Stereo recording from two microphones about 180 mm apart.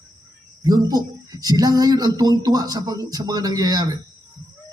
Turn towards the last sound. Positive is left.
turn(degrees=-20)  # may be behind; listen again after turning